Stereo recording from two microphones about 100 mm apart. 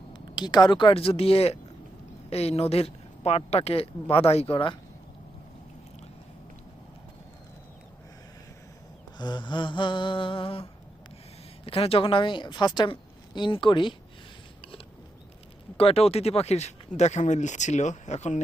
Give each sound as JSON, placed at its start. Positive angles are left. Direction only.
{"t": 0.1, "sound": "speech", "side_deg": 45}
{"t": 0.9, "sound": "speech", "side_deg": 75}
{"t": 4.5, "sound": "speech", "side_deg": 55}
{"t": 9.1, "sound": "a woman's voice", "side_deg": 45}
{"t": 15.8, "sound": "speech", "side_deg": 75}
{"t": 17.2, "sound": "speech", "side_deg": 55}